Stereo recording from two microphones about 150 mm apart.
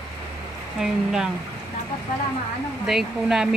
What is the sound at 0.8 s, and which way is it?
Speech, 5° right (ahead or behind).